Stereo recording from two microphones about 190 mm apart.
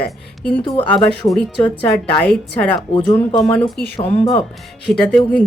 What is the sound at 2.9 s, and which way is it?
Speech, 25° left (ahead or behind).